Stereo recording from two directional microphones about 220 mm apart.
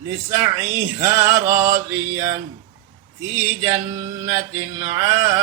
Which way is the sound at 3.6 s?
15° right (ahead or behind).